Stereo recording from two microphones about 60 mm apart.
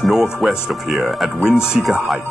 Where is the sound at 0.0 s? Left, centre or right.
Centre.